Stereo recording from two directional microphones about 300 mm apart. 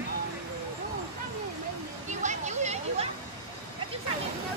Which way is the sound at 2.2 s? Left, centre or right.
Right.